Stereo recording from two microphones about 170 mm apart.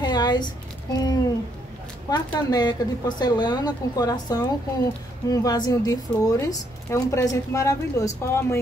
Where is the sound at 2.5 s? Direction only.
25° left (ahead or behind).